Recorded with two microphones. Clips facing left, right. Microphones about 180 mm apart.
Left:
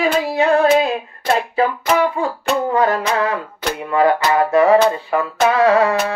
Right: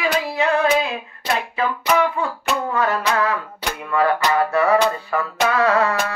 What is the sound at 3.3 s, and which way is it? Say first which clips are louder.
Music: left 4 dB; 20° left (ahead or behind).